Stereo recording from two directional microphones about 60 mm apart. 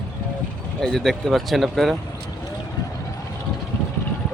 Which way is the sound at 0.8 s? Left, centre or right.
Centre.